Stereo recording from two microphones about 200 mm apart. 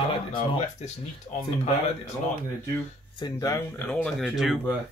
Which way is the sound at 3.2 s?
20° left (ahead or behind).